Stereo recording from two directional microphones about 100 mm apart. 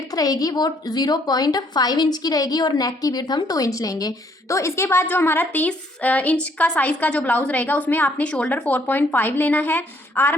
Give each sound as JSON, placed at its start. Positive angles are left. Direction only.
{"t": 0.1, "sound": "a woman's voice", "side_deg": 40}